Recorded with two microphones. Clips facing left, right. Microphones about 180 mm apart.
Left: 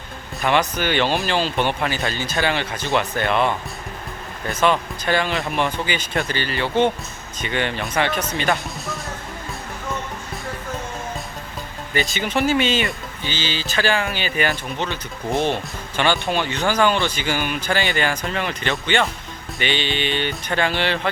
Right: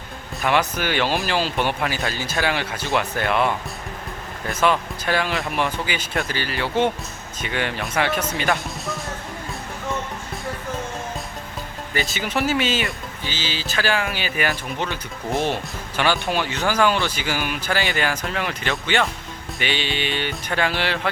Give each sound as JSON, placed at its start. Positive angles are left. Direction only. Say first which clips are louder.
{"t": 0.4, "sound": "speech", "louder": "left 1 dB", "side_deg": -5}
{"t": 11.9, "sound": "speech", "louder": "left 2 dB", "side_deg": -5}